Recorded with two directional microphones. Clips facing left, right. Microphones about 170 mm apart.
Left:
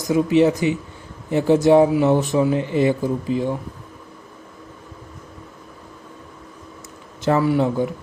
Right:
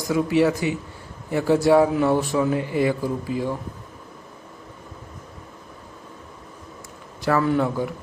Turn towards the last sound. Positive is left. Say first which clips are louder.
# left 3 dB
turn(degrees=15)  # may be behind; listen again after turning